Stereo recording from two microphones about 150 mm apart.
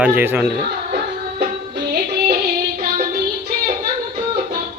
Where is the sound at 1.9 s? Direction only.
90° right.